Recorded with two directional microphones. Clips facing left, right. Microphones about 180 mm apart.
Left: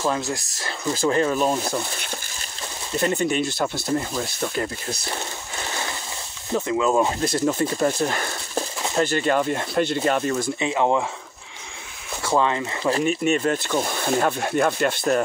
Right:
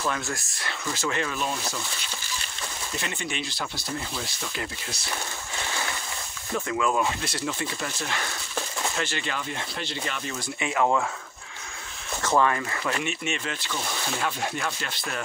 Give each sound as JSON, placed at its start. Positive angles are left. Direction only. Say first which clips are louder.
{"t": 1.0, "sound": "speech", "louder": "left 9 dB", "side_deg": 35}
{"t": 3.0, "sound": "speech", "louder": "left 13 dB", "side_deg": 40}
{"t": 6.5, "sound": "speech", "louder": "left 5 dB", "side_deg": 25}
{"t": 7.1, "sound": "speech", "louder": "left 8 dB", "side_deg": 45}
{"t": 10.6, "sound": "speech", "louder": "left 1 dB", "side_deg": 25}
{"t": 12.2, "sound": "speech", "louder": "left 2 dB", "side_deg": 15}
{"t": 12.9, "sound": "speech", "louder": "left 9 dB", "side_deg": 40}